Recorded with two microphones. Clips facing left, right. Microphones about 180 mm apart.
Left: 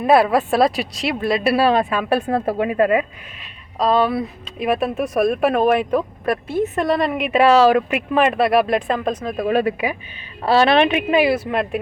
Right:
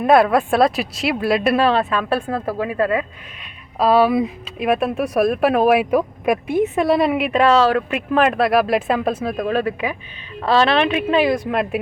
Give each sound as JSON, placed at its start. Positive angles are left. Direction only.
{"t": 0.0, "sound": "speech", "side_deg": 0}
{"t": 1.5, "sound": "a woman's voice", "side_deg": 10}
{"t": 3.8, "sound": "speech", "side_deg": -5}
{"t": 4.6, "sound": "speech", "side_deg": 0}
{"t": 7.3, "sound": "speech", "side_deg": 10}
{"t": 9.4, "sound": "a woman's voice", "side_deg": 15}